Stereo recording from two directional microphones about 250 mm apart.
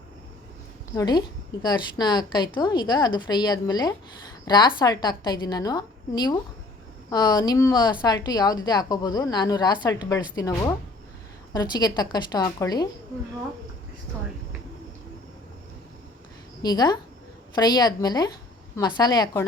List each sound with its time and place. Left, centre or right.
0.9 s a woman's voice: centre
16.6 s a woman's voice: centre